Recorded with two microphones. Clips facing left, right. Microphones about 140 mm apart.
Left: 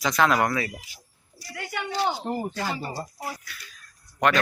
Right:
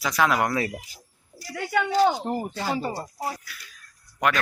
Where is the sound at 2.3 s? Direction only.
25° right (ahead or behind).